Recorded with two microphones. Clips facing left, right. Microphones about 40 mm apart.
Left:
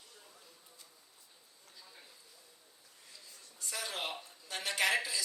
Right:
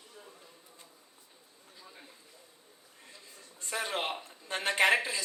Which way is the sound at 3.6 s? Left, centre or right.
Right.